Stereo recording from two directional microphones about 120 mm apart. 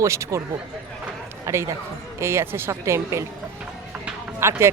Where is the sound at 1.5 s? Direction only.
25° right (ahead or behind).